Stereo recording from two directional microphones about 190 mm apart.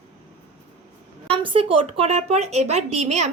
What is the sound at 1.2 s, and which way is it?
Speech, 25° right (ahead or behind).